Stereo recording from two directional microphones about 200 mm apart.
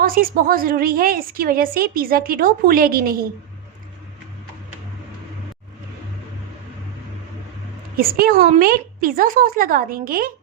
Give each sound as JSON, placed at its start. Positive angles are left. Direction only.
{"t": 0.0, "sound": "a woman's voice", "side_deg": -45}
{"t": 7.9, "sound": "a woman's voice", "side_deg": -50}